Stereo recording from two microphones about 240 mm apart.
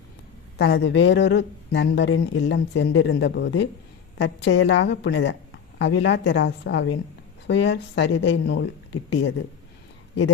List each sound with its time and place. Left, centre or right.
0.6 s a woman's voice: left